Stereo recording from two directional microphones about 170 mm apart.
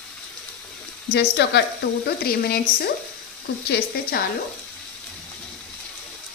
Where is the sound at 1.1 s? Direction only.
85° left.